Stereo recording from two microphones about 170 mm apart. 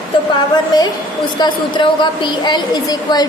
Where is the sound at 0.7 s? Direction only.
25° left (ahead or behind).